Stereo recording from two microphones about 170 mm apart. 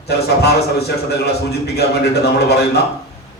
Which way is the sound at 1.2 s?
75° left (ahead or behind).